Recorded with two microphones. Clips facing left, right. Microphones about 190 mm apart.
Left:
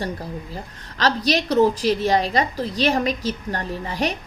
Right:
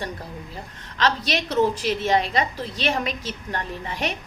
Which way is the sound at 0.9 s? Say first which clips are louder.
Left 3 dB; 35° left (ahead or behind).